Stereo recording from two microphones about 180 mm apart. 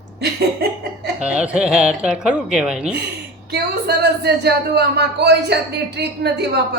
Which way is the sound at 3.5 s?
65° right (ahead or behind).